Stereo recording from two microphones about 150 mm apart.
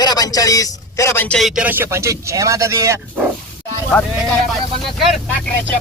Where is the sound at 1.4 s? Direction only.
5° right (ahead or behind); by 3.2 s 20° right (ahead or behind).